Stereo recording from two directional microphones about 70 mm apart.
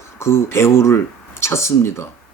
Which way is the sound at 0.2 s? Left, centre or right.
Left.